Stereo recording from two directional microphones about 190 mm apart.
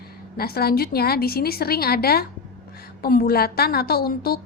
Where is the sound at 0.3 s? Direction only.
55° left (ahead or behind).